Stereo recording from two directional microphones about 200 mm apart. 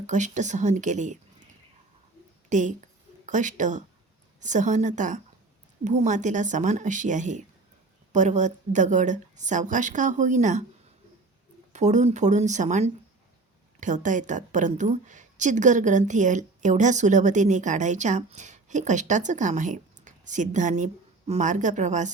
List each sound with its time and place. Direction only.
0.1 s a woman's voice: 35° right (ahead or behind)
2.5 s a woman's voice: 40° right (ahead or behind)
11.7 s a woman's voice: 35° right (ahead or behind)